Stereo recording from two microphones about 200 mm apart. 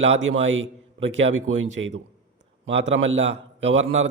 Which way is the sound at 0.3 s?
75° right (ahead or behind).